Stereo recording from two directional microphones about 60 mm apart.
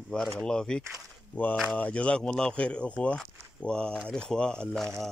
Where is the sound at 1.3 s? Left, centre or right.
Left.